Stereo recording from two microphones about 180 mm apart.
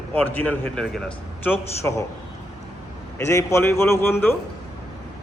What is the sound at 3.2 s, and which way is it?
A man's voice, 15° left (ahead or behind).